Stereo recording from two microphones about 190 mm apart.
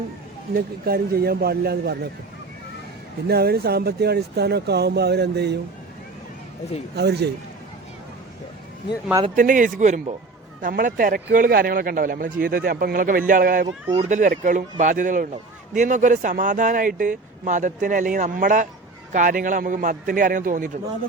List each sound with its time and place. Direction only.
0.5 s speech: 50° right (ahead or behind)
3.2 s speech: 55° right (ahead or behind)
6.9 s speech: 60° right (ahead or behind)
9.2 s speech: 45° right (ahead or behind)